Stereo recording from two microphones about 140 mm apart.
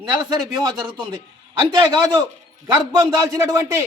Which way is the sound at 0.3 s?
30° right (ahead or behind).